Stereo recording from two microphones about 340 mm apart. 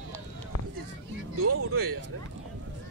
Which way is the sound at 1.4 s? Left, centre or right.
Right.